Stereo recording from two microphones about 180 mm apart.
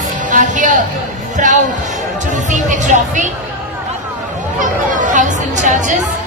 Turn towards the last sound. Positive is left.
turn(degrees=-45)  # may be behind; listen again after turning